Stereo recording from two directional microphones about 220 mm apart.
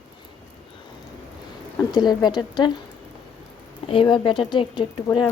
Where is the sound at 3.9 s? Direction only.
20° left (ahead or behind).